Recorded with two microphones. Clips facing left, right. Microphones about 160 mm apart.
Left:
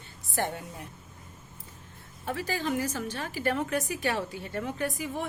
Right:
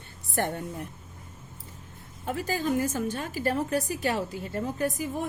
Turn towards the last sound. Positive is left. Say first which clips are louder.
# right 3 dB
turn(degrees=-40)  # may be behind; listen again after turning